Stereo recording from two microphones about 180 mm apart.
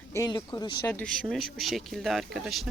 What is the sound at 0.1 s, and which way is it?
Speech, 20° left (ahead or behind).